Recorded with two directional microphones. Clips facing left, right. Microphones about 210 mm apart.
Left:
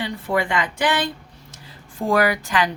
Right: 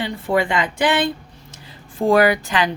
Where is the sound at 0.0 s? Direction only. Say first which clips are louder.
Right 3 dB; 25° right (ahead or behind).